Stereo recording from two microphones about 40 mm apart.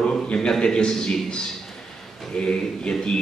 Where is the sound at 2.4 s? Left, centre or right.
Left.